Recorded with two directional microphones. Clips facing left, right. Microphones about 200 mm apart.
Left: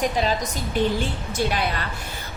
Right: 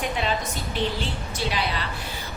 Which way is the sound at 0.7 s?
50° left (ahead or behind).